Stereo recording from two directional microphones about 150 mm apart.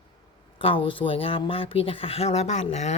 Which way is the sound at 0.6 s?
35° left (ahead or behind).